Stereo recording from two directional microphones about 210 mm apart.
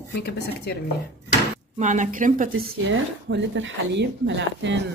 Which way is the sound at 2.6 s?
55° right (ahead or behind).